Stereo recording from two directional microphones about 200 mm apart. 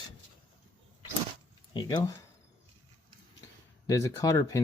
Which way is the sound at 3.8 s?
15° left (ahead or behind).